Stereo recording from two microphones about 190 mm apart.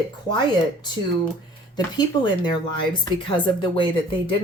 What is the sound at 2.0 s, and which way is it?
Speech, 25° left (ahead or behind).